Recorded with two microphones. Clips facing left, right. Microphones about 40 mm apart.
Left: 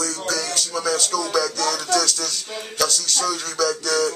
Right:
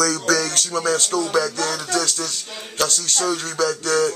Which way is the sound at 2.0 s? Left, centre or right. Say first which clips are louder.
Even; right.